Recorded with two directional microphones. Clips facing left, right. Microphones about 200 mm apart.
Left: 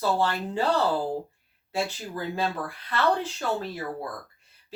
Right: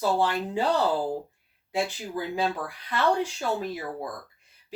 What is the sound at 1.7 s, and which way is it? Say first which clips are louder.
Speech: right 1 dB; 15° right (ahead or behind).